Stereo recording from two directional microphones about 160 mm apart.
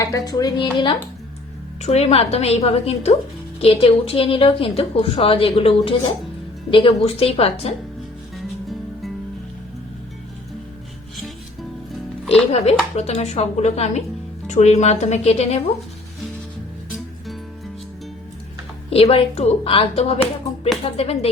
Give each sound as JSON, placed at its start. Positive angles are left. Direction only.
{"t": 0.0, "sound": "speech", "side_deg": 20}
{"t": 1.8, "sound": "a woman's voice", "side_deg": 40}
{"t": 12.5, "sound": "a woman's voice", "side_deg": 40}
{"t": 18.9, "sound": "a woman's voice", "side_deg": 40}